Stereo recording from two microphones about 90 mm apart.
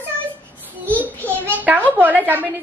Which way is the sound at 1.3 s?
20° left (ahead or behind).